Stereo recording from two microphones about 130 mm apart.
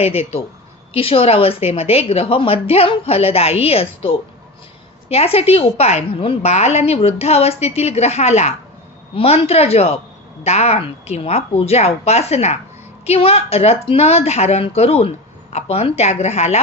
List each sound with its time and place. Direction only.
0.0 s a woman's voice: 50° left (ahead or behind)